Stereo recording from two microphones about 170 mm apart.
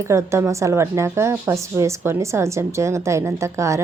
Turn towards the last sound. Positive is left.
turn(degrees=-15)  # may be behind; listen again after turning